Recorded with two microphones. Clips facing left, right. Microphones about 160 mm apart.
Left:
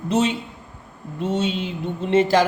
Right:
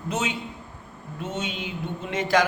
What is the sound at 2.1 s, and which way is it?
Speech, 30° left (ahead or behind).